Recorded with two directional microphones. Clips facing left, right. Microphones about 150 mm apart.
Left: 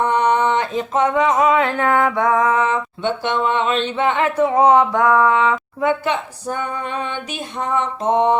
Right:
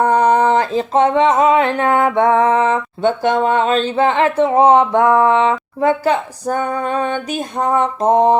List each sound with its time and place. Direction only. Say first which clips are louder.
0.0 s speech: right 4 dB; 40° right (ahead or behind)